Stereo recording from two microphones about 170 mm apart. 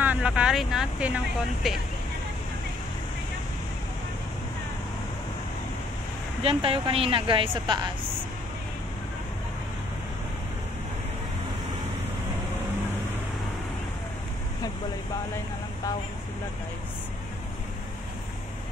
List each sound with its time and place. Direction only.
0.0 s speech: 10° right (ahead or behind)
6.4 s speech: 35° right (ahead or behind)